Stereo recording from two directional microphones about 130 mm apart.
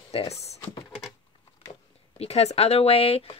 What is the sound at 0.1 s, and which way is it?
Speech, 50° left (ahead or behind).